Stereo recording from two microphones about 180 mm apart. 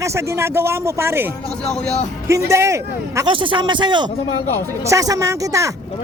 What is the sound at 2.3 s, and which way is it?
Speech, 15° right (ahead or behind).